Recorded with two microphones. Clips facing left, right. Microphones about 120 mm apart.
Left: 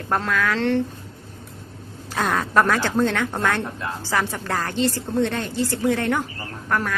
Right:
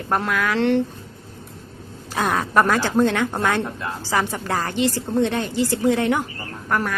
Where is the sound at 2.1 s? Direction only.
10° right (ahead or behind).